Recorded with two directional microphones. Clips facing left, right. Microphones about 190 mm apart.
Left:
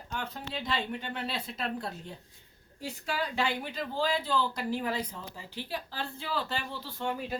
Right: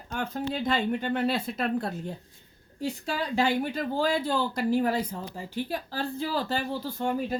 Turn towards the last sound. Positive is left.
turn(degrees=-45)  # may be behind; listen again after turning